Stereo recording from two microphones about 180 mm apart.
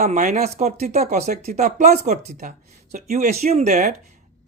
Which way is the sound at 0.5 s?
35° right (ahead or behind).